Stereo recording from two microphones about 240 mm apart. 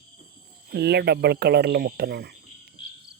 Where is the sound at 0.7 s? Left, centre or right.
Right.